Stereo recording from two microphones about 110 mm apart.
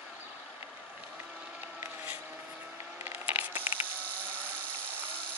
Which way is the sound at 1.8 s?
15° right (ahead or behind).